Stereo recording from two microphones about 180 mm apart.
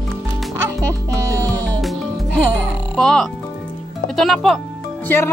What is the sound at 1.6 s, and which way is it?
Music, 5° left (ahead or behind).